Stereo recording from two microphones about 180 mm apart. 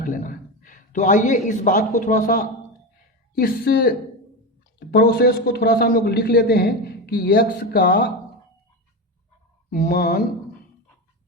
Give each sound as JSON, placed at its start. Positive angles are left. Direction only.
{"t": 0.0, "sound": "a man's voice", "side_deg": 50}
{"t": 3.3, "sound": "a man's voice", "side_deg": 60}
{"t": 9.6, "sound": "a man's voice", "side_deg": 45}